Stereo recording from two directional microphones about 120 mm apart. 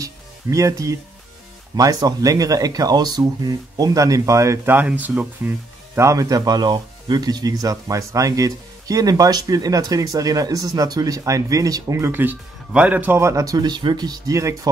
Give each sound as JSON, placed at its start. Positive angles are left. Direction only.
{"t": 0.0, "sound": "music", "side_deg": -25}
{"t": 1.8, "sound": "speech", "side_deg": -30}